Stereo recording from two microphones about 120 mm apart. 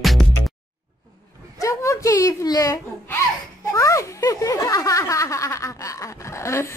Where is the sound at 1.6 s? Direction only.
25° left (ahead or behind).